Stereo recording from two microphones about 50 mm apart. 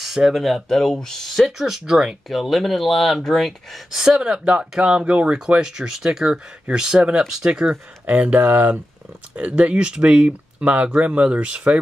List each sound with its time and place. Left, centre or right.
0.0 s a sound: centre
0.3 s speech: centre
1.6 s speech: centre
2.2 s speech: centre
4.0 s speech: centre
8.1 s speech: right